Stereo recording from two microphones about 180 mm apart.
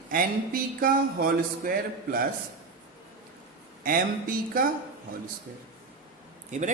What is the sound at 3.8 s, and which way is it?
Speech, 50° right (ahead or behind).